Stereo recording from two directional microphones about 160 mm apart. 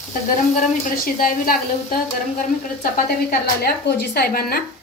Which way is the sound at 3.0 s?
75° left (ahead or behind).